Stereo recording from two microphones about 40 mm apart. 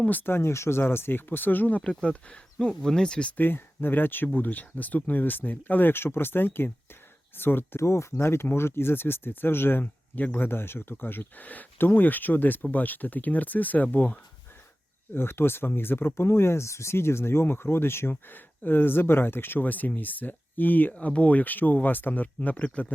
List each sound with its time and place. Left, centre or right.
0.1 s speech: left
0.3 s speech: left
1.8 s speech: left
3.3 s speech: left
4.4 s speech: left
5.2 s speech: left
6.0 s speech: left
11.9 s speech: left
15.1 s speech: left
18.3 s speech: left
22.5 s speech: left